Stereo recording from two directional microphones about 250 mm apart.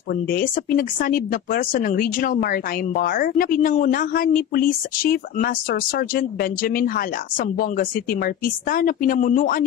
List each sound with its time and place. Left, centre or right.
0.3 s speech: left